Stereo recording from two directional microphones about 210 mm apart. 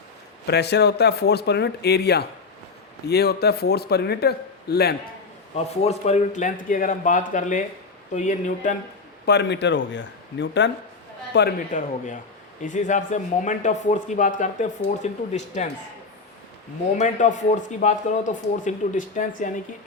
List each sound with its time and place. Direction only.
0.4 s a man's voice: 50° left (ahead or behind)
5.5 s speech: 30° left (ahead or behind)
9.2 s speech: 55° left (ahead or behind)
11.7 s speech: 40° left (ahead or behind)
17.0 s speech: 35° left (ahead or behind)